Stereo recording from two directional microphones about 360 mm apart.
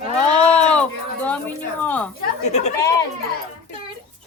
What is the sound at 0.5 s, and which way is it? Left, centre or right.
A woman's voice, centre.